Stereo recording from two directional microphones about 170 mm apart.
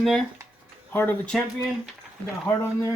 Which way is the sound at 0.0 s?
5° left (ahead or behind).